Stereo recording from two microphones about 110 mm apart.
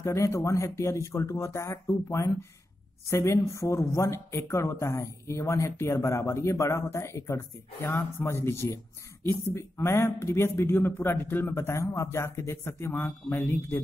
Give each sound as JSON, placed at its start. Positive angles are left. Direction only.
{"t": 0.0, "sound": "a woman's voice", "side_deg": 25}